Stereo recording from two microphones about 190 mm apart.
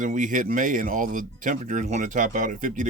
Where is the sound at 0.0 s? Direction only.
45° right (ahead or behind).